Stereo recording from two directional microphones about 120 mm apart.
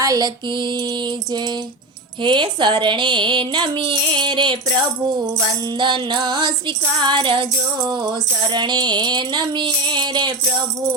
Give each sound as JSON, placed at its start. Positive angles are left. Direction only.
{"t": 0.0, "sound": "music", "side_deg": -30}
{"t": 2.2, "sound": "music", "side_deg": -40}